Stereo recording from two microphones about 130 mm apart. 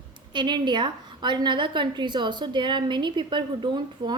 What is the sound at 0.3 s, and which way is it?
A woman's voice, 35° right (ahead or behind).